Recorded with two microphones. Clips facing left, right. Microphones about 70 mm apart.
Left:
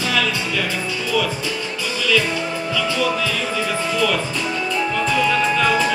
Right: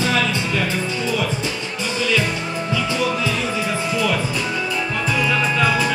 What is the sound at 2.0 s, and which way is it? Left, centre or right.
Music, right.